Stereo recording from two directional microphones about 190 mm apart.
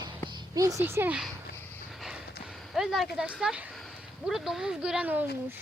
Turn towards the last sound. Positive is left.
turn(degrees=-5)  # may be behind; listen again after turning